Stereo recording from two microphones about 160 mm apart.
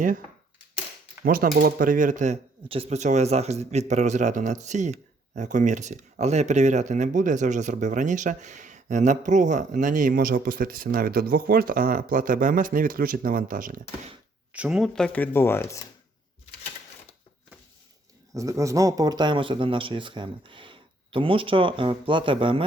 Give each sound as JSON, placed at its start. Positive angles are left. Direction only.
{"t": 1.2, "sound": "speech", "side_deg": -65}
{"t": 2.6, "sound": "speech", "side_deg": -35}
{"t": 14.5, "sound": "speech", "side_deg": -5}
{"t": 18.3, "sound": "speech", "side_deg": -20}